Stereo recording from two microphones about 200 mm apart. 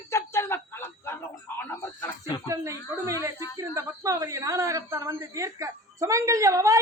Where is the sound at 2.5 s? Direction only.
15° right (ahead or behind).